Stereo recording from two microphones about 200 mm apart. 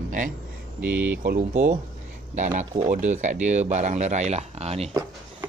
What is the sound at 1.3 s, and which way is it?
Speech, 40° right (ahead or behind).